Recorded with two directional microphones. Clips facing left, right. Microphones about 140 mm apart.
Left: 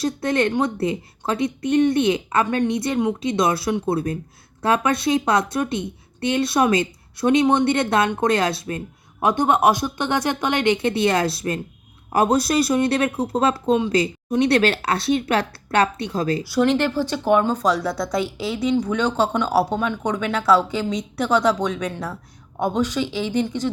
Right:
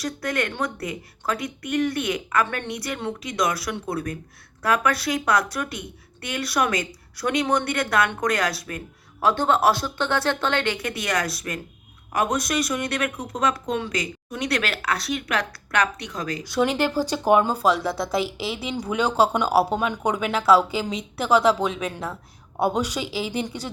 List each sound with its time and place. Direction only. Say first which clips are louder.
0.0 s speech: left 6 dB; 25° left (ahead or behind)
16.6 s speech: left 3 dB; 10° right (ahead or behind)